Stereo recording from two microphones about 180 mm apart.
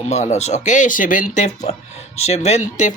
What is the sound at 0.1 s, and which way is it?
Speech, 40° left (ahead or behind).